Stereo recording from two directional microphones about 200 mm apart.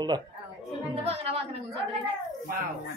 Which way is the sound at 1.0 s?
30° right (ahead or behind).